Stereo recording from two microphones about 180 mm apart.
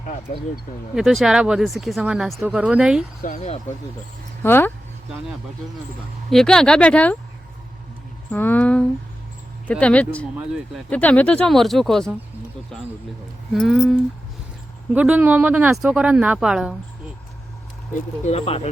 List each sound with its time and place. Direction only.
0.0 s speech: 45° left (ahead or behind)
0.9 s speech: centre (ahead or behind)
3.2 s speech: 45° left (ahead or behind)
4.4 s a sound: 10° left (ahead or behind)
6.3 s speech: 5° left (ahead or behind)
8.3 s a sound: 10° left (ahead or behind)
10.8 s speech: 5° left (ahead or behind)
13.5 s speech: centre (ahead or behind)
18.3 s speech: 35° left (ahead or behind)